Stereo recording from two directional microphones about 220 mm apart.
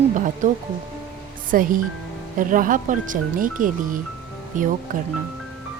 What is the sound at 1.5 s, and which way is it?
Speech, 40° right (ahead or behind).